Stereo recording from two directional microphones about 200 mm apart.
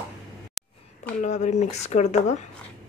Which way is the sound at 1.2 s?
35° left (ahead or behind).